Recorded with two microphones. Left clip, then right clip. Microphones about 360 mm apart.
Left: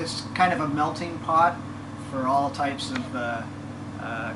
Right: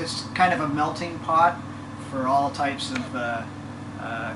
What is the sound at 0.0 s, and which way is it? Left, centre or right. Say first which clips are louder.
Speech: right 1 dB; centre.